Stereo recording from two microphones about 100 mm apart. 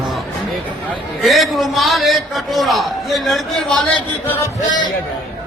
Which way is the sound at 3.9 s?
20° left (ahead or behind).